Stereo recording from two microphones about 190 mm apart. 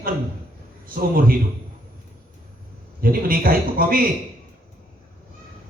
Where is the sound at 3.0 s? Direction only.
50° right (ahead or behind).